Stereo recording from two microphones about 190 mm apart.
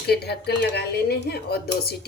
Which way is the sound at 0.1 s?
60° left (ahead or behind).